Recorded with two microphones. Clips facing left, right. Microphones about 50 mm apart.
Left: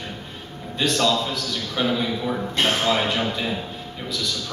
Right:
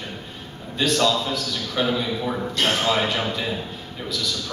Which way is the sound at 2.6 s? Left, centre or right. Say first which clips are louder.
Left 1 dB; left.